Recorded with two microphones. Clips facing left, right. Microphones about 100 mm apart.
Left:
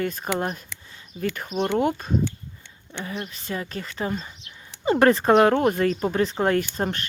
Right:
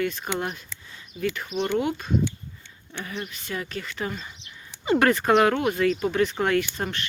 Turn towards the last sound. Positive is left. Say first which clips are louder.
# left 2 dB
turn(degrees=40)  # may be behind; listen again after turning